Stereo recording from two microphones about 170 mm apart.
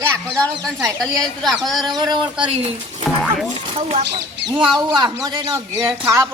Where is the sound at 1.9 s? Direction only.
25° right (ahead or behind).